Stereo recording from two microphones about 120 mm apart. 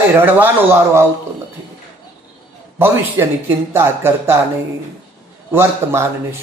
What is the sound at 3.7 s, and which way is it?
Speech, 20° right (ahead or behind).